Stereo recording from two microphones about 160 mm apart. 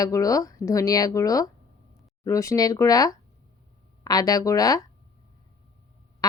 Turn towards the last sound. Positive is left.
turn(degrees=20)  # may be behind; listen again after turning